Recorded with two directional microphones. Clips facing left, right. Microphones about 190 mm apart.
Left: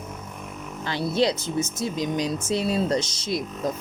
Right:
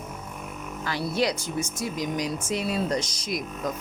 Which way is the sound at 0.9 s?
25° left (ahead or behind).